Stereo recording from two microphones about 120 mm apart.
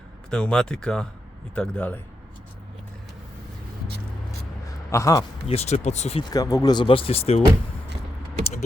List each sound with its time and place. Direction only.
0.3 s speech: 5° left (ahead or behind)
4.9 s speech: 25° left (ahead or behind)
5.5 s speech: 60° left (ahead or behind)
6.3 s speech: 30° left (ahead or behind)
6.8 s speech: 50° left (ahead or behind)